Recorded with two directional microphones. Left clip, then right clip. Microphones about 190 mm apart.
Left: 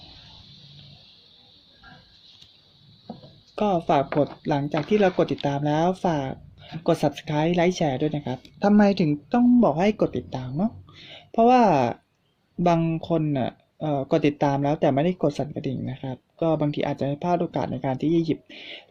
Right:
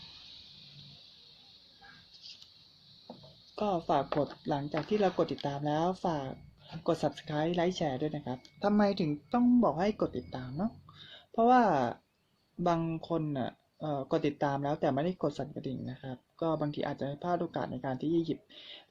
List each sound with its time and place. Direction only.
3.5 s speech: 30° left (ahead or behind)